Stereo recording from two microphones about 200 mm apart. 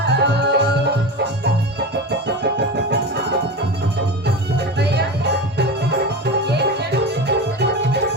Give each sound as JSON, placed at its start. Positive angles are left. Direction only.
{"t": 0.0, "sound": "music", "side_deg": -55}
{"t": 4.8, "sound": "music", "side_deg": -55}